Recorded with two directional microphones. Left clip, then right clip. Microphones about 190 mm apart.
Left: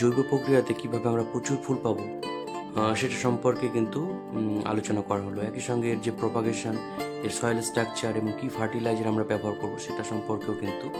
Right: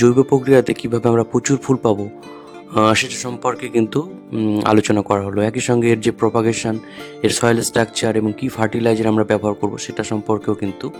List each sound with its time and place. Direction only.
0.0 s speech: 50° right (ahead or behind)
4.4 s speech: 35° right (ahead or behind)
4.6 s speech: 50° right (ahead or behind)